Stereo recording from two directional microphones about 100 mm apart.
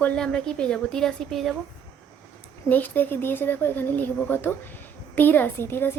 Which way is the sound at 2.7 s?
20° left (ahead or behind).